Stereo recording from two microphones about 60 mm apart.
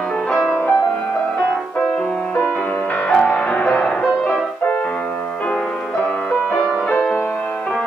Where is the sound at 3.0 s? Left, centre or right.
Centre.